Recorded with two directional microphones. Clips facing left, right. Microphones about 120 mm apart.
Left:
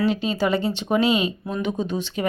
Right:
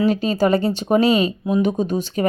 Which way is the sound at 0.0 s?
40° right (ahead or behind).